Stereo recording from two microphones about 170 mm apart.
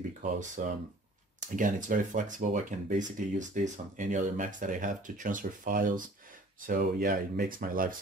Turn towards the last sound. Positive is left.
turn(degrees=-55)  # may be behind; listen again after turning